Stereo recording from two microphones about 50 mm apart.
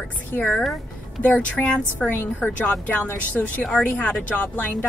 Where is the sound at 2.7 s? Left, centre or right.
Left.